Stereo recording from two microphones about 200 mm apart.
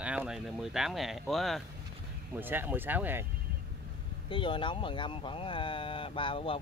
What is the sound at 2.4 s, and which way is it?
Speech, 10° right (ahead or behind).